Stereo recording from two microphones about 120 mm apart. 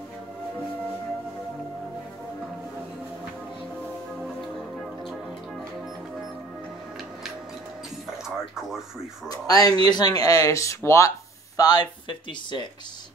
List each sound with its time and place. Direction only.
4.2 s music: centre (ahead or behind)
8.5 s speech: 5° right (ahead or behind)
9.3 s speech: 30° left (ahead or behind)